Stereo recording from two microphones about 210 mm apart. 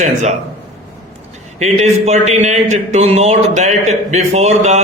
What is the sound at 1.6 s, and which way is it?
A man's voice, 30° right (ahead or behind).